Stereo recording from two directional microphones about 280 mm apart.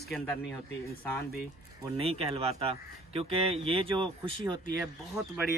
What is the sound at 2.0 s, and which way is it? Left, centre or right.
Speech, right.